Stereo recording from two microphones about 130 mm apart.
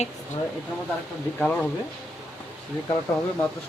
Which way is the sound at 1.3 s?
10° left (ahead or behind).